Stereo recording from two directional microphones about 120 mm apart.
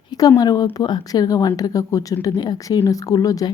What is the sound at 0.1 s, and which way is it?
Speech, 30° left (ahead or behind).